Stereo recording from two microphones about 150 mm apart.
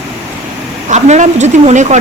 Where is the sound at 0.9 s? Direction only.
50° right (ahead or behind).